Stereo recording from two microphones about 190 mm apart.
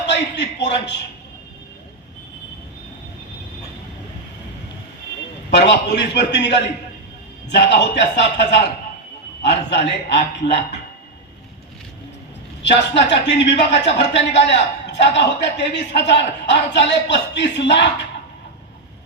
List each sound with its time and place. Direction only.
0.0 s a man's voice: 65° left (ahead or behind)
5.5 s a man's voice: 65° left (ahead or behind)
12.6 s a man's voice: 65° left (ahead or behind)